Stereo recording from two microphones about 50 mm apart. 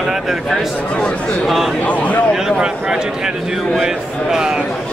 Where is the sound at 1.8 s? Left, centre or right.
Left.